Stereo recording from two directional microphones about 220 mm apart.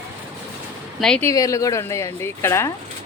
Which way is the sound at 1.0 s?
5° left (ahead or behind).